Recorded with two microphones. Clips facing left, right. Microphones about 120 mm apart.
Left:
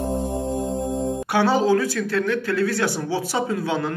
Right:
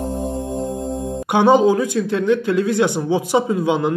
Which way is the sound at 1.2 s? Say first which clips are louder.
Right 7 dB; 20° right (ahead or behind).